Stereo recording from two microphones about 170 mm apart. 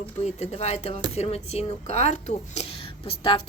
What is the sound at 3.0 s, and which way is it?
Speech, 30° left (ahead or behind).